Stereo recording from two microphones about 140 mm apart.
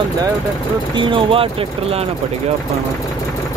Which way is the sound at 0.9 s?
40° right (ahead or behind).